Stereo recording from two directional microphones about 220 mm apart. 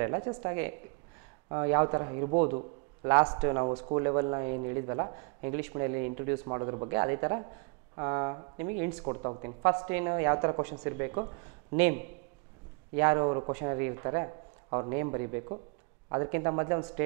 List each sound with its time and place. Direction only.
0.0 s a man's voice: 20° right (ahead or behind)